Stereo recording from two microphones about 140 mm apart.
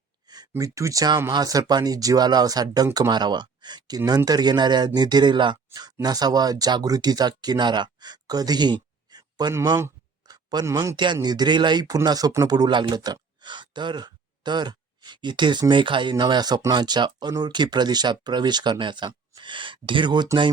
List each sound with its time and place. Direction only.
0.5 s speech: 20° right (ahead or behind)